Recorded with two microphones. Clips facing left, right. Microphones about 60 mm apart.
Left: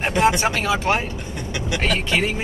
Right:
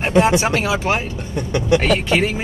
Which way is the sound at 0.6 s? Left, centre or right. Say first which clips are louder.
Right 1 dB; centre.